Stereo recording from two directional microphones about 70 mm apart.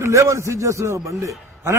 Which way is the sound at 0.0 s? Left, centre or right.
Right.